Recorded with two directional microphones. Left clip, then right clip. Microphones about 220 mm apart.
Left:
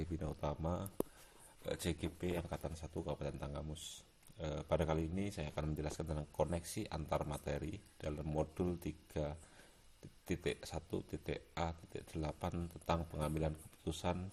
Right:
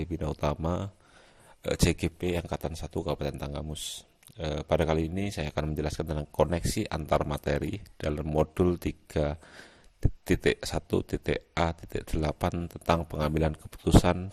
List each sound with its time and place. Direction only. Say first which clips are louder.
0.0 s a man's voice: right 12 dB; 35° right (ahead or behind)